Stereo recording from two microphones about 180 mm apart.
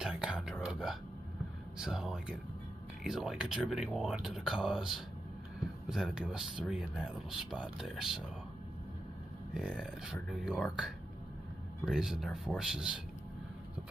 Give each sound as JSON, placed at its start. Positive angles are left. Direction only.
{"t": 0.0, "sound": "whispering", "side_deg": -5}
{"t": 1.8, "sound": "speech", "side_deg": -5}
{"t": 9.5, "sound": "speech", "side_deg": -5}